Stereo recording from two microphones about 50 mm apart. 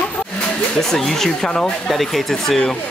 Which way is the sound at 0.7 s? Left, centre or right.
Centre.